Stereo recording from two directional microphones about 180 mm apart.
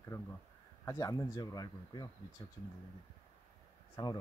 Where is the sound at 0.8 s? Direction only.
20° left (ahead or behind).